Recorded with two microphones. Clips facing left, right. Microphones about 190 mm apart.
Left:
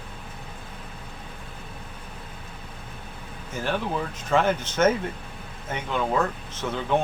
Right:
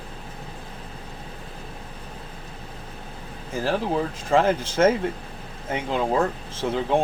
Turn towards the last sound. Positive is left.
turn(degrees=-30)  # may be behind; listen again after turning